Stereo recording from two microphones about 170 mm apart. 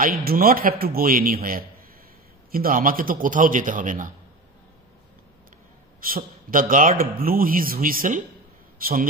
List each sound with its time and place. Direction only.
0.0 s a man's voice: 60° right (ahead or behind)
5.9 s a man's voice: 55° right (ahead or behind)